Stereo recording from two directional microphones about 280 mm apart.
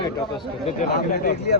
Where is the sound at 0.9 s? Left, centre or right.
Left.